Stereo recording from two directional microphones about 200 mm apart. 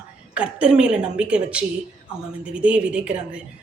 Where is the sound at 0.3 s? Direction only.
5° right (ahead or behind).